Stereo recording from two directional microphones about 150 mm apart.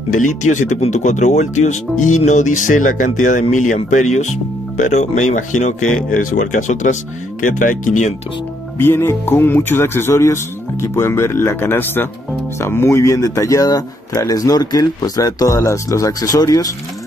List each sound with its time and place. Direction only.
0.2 s speech: 55° left (ahead or behind)
8.7 s speech: 15° left (ahead or behind)